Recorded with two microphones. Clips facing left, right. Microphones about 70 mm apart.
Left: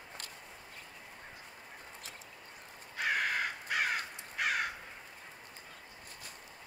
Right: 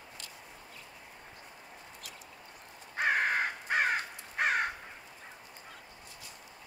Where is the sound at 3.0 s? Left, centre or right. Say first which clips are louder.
Right 4 dB; right.